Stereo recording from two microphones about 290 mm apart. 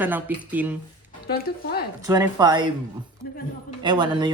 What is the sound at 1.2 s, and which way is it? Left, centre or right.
Speech, left.